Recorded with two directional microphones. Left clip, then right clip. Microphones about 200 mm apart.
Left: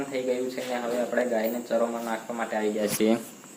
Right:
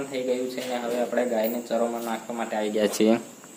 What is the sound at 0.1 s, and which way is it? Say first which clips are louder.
Speech: right 1 dB; 10° right (ahead or behind).